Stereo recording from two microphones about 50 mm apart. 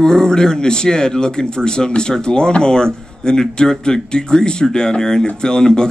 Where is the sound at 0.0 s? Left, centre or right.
Centre.